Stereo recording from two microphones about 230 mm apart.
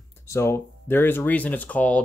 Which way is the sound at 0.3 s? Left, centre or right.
Centre.